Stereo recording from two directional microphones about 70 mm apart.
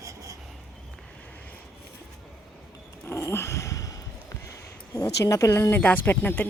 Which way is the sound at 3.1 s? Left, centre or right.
Left.